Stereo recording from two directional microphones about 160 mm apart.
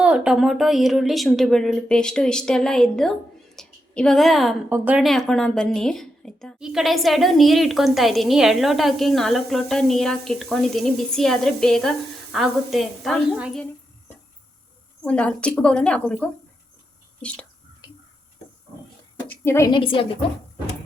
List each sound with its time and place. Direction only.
0.0 s a woman's voice: 5° right (ahead or behind)
5.0 s a woman's voice: centre (ahead or behind)
15.0 s a woman's voice: 5° left (ahead or behind)
19.3 s a woman's voice: 15° left (ahead or behind)
19.7 s a woman's voice: 35° left (ahead or behind)